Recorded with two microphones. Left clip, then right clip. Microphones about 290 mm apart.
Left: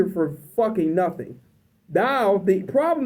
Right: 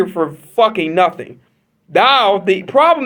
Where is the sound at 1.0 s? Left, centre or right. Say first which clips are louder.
Right 9 dB; centre.